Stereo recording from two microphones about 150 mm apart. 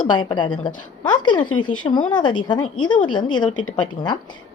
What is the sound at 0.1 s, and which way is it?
A woman's voice, 30° left (ahead or behind).